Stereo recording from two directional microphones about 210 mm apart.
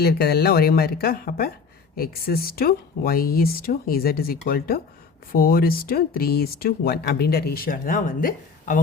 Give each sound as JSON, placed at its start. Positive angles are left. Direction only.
{"t": 0.0, "sound": "speech", "side_deg": 50}